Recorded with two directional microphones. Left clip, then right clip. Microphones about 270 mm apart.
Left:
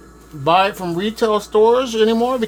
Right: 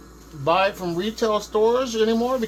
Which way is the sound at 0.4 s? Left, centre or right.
Left.